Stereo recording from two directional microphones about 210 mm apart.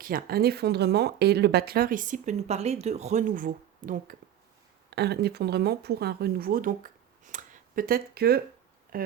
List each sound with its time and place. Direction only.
0.0 s speech: 45° right (ahead or behind)
4.9 s speech: 50° right (ahead or behind)